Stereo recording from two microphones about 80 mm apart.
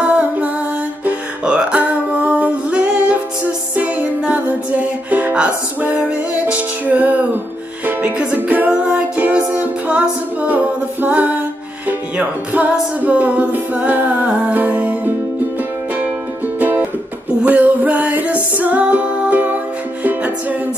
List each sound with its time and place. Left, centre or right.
0.0 s music: centre
16.5 s music: right